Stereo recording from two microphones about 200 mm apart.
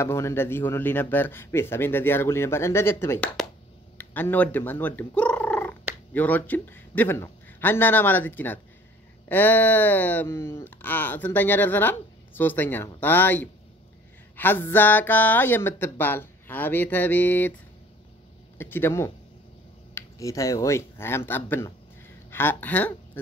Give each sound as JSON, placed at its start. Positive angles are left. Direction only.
{"t": 0.0, "sound": "speech", "side_deg": 15}
{"t": 18.6, "sound": "speech", "side_deg": 10}